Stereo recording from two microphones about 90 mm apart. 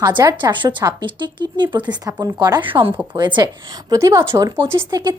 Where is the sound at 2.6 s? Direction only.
75° right (ahead or behind).